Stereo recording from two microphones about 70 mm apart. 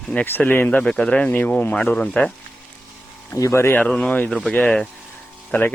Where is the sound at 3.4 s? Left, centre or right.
Left.